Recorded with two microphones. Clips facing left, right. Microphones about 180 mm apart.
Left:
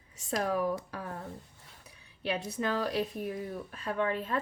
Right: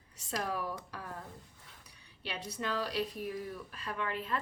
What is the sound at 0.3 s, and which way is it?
Speech, 50° left (ahead or behind).